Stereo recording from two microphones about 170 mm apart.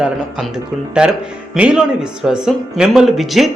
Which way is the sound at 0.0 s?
5° right (ahead or behind).